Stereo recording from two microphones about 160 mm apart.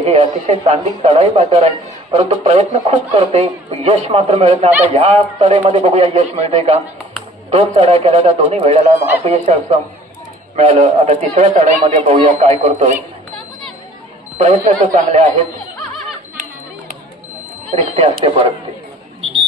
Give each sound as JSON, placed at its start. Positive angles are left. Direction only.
{"t": 0.0, "sound": "a man's voice", "side_deg": -40}
{"t": 14.4, "sound": "a man's voice", "side_deg": -50}
{"t": 17.6, "sound": "speech", "side_deg": -40}